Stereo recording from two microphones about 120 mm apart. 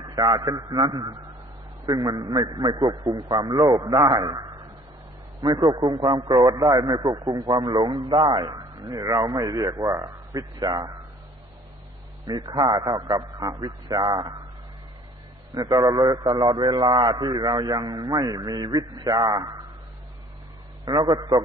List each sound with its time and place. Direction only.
0.0 s a man's voice: 35° right (ahead or behind)
12.3 s a man's voice: 35° right (ahead or behind)
15.5 s a man's voice: 35° right (ahead or behind)
20.8 s a man's voice: 35° right (ahead or behind)